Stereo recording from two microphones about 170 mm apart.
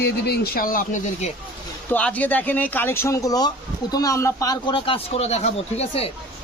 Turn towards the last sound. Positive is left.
turn(degrees=35)  # may be behind; listen again after turning